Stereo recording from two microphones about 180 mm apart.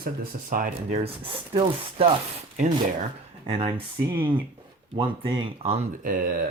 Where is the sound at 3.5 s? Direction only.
30° right (ahead or behind).